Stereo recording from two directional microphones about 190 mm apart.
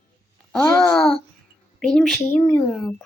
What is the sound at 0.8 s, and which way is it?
Female singing, 5° left (ahead or behind).